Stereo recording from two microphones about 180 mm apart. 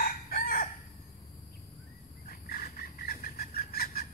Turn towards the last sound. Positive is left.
turn(degrees=55)  # may be behind; listen again after turning